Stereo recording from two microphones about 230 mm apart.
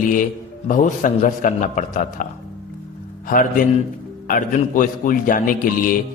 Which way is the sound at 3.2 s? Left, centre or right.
Left.